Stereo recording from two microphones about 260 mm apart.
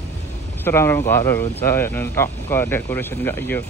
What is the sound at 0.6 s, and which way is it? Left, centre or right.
Speech, centre.